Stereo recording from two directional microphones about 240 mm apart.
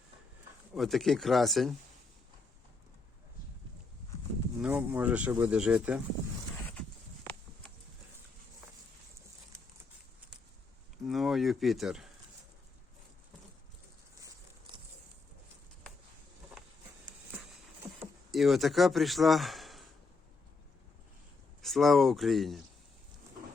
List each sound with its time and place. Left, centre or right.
0.7 s speech: centre
4.6 s speech: centre
10.9 s a sound: centre
14.2 s a sound: centre
18.3 s speech: centre
21.6 s speech: centre